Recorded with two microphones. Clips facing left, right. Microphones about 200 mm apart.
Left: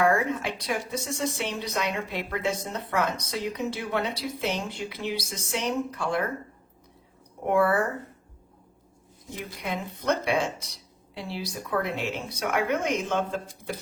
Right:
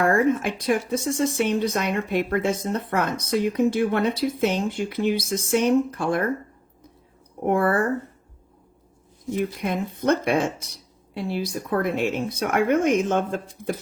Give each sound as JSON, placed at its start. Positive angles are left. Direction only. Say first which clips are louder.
{"t": 0.0, "sound": "speech", "louder": "right 4 dB", "side_deg": -50}
{"t": 7.4, "sound": "speech", "louder": "right 2 dB", "side_deg": -50}
{"t": 9.3, "sound": "speech", "louder": "right 8 dB", "side_deg": -55}